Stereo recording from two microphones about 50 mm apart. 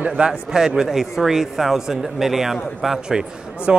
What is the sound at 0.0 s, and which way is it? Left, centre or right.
Speech, right.